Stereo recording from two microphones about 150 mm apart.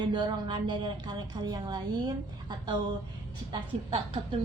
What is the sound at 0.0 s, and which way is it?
A woman's voice, 30° right (ahead or behind).